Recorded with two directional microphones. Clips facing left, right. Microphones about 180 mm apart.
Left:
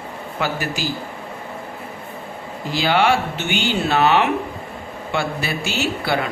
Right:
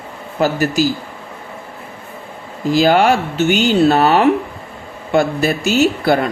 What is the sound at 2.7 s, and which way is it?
A woman's voice, 45° right (ahead or behind).